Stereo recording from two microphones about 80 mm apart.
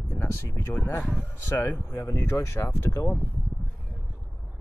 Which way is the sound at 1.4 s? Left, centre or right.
Left.